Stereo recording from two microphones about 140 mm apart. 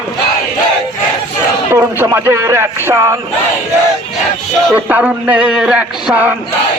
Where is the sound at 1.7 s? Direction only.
15° right (ahead or behind).